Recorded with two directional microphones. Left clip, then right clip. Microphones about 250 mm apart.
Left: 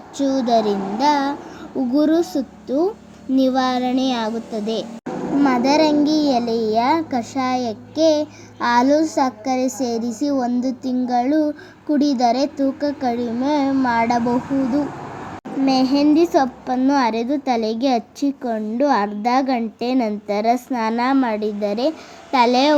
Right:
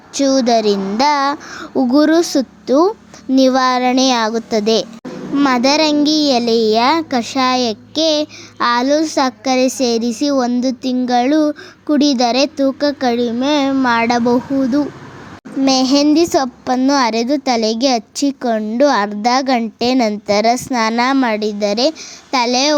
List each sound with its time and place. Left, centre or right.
0.1 s a child's voice: right